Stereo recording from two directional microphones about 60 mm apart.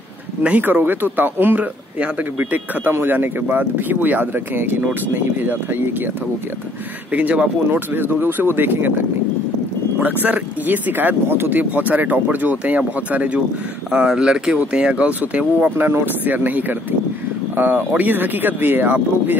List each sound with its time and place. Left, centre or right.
0.4 s speech: right
7.1 s speech: right
9.9 s speech: right
13.9 s speech: centre; by 19.3 s right